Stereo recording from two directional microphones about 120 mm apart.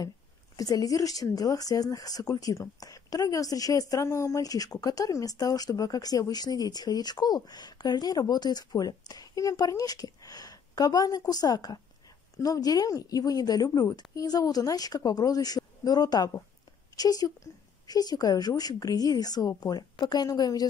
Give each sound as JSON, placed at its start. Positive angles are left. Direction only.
{"t": 0.6, "sound": "a woman's voice", "side_deg": 30}